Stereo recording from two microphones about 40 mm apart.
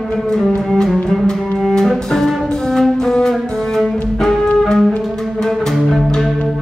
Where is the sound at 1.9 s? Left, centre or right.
Centre.